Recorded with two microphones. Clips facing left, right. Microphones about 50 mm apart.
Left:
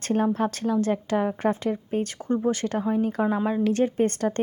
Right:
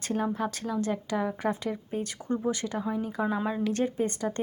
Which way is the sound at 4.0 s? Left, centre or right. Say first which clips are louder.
Left 6 dB; left.